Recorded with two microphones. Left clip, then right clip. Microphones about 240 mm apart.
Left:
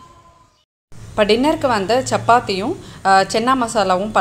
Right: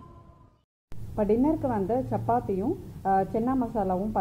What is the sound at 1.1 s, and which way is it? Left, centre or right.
A woman's voice, left.